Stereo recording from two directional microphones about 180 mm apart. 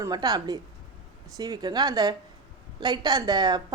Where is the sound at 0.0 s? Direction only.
20° right (ahead or behind).